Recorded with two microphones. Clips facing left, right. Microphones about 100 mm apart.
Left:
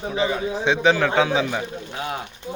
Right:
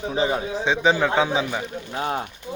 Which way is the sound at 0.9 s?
15° right (ahead or behind).